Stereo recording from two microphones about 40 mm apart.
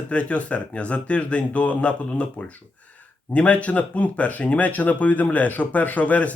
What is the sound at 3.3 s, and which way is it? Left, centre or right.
A man's voice, left.